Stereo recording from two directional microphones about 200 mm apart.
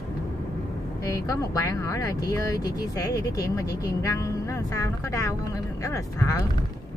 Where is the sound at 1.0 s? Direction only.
15° left (ahead or behind).